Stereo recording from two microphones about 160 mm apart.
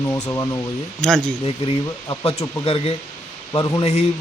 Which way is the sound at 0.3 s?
20° left (ahead or behind).